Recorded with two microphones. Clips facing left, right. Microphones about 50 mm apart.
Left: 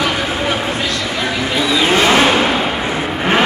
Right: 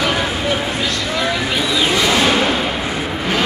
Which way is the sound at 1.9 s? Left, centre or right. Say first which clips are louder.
Left 4 dB; left.